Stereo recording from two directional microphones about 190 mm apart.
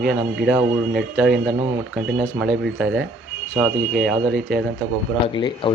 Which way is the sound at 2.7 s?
5° right (ahead or behind).